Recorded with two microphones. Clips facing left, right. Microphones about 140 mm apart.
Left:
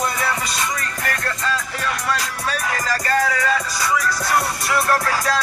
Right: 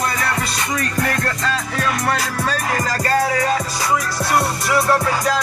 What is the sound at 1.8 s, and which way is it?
Music, 75° right (ahead or behind).